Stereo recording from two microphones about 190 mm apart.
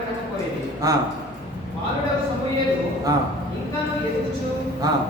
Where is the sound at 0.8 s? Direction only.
20° right (ahead or behind).